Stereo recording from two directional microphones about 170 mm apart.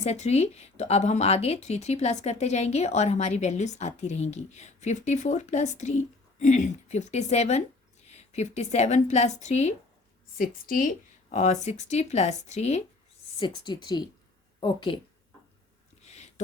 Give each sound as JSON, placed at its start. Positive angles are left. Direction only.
{"t": 0.0, "sound": "a woman's voice", "side_deg": 40}
{"t": 10.3, "sound": "speech", "side_deg": 55}
{"t": 13.4, "sound": "a woman's voice", "side_deg": 25}
{"t": 16.0, "sound": "a sound", "side_deg": 40}